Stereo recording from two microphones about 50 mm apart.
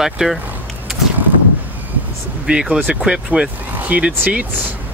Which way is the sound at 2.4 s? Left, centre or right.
Right.